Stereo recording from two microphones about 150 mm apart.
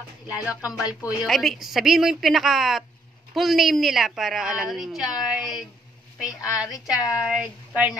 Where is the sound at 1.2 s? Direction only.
Centre (ahead or behind).